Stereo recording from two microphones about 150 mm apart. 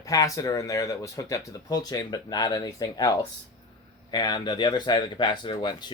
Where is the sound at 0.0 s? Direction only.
20° left (ahead or behind).